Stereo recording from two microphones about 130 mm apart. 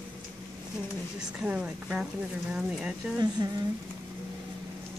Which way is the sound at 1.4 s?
10° right (ahead or behind).